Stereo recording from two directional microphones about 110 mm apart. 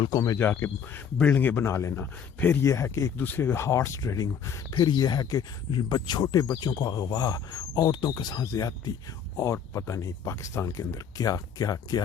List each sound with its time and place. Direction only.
0.1 s speech: 30° left (ahead or behind)
0.3 s speech: 20° left (ahead or behind)
3.2 s speech: 15° left (ahead or behind); by 12.0 s 35° left (ahead or behind)